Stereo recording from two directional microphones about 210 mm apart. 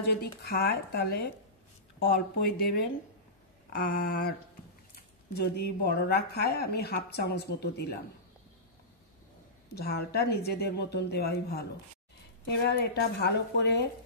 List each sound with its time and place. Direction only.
0.5 s a woman's voice: 50° left (ahead or behind)
9.8 s a woman's voice: 50° left (ahead or behind)